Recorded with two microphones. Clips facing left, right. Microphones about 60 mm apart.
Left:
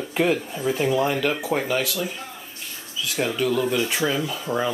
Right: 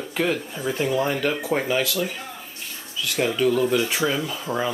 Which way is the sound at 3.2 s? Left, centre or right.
Centre.